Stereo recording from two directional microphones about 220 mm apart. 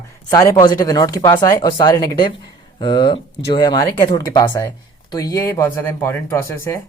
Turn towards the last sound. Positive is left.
turn(degrees=10)  # may be behind; listen again after turning